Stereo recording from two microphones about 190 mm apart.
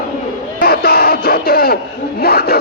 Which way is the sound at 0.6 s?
55° left (ahead or behind).